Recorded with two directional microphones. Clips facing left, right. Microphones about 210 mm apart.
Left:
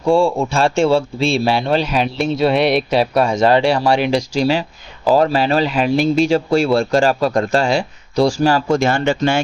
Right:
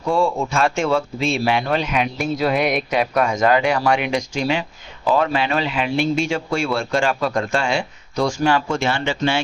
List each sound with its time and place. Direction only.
0.0 s speech: 30° left (ahead or behind); by 9.4 s 45° left (ahead or behind)